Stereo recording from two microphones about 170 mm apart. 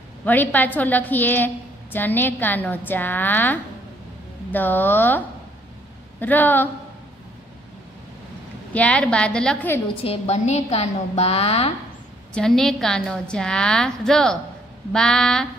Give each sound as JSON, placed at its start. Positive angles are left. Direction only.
{"t": 0.2, "sound": "a woman's voice", "side_deg": 10}
{"t": 8.7, "sound": "a woman's voice", "side_deg": 5}
{"t": 9.9, "sound": "a woman's voice", "side_deg": 35}
{"t": 12.4, "sound": "a woman's voice", "side_deg": 0}